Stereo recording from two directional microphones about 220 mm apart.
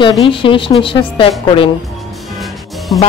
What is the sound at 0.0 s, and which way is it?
A woman's voice, 25° left (ahead or behind).